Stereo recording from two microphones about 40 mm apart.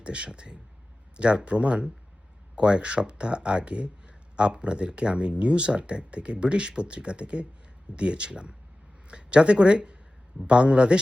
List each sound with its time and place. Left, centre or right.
0.0 s speech: right